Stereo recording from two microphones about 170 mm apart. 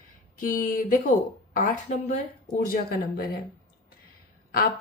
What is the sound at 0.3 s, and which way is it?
Speech, 55° left (ahead or behind).